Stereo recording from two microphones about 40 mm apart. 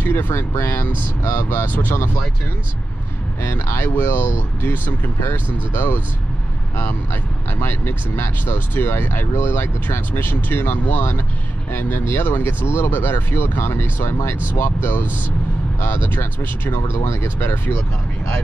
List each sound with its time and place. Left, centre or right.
0.0 s speech: left
1.2 s speech: left
1.7 s speech: left
3.4 s speech: left
7.6 s speech: left
8.5 s speech: left
9.0 s speech: left
15.8 s speech: left